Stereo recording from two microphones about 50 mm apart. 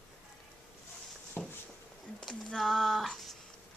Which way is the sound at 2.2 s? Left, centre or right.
Centre.